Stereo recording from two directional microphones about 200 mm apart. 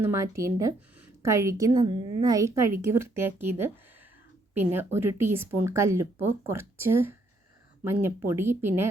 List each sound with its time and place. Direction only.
0.0 s speech: 15° right (ahead or behind)